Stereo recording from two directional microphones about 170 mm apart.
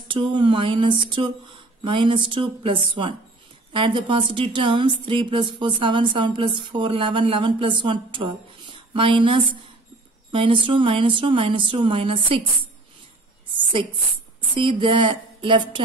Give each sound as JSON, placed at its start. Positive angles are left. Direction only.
{"t": 0.1, "sound": "speech", "side_deg": -30}
{"t": 13.6, "sound": "a sound", "side_deg": -30}
{"t": 14.5, "sound": "speech", "side_deg": -30}